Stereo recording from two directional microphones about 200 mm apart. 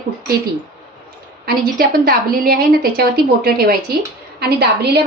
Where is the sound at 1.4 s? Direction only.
50° right (ahead or behind).